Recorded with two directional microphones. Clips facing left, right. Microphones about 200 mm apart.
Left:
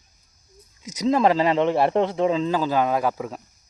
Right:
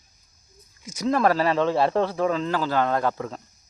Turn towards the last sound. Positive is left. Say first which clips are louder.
# left 1 dB
turn(degrees=10)  # may be behind; listen again after turning